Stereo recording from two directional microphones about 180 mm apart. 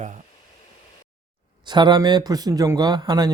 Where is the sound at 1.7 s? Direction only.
25° right (ahead or behind).